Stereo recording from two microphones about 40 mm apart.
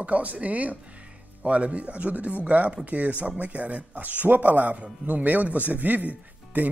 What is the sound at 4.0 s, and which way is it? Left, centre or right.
A man's voice, right.